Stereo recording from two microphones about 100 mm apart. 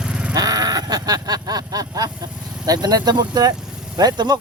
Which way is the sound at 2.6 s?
40° right (ahead or behind).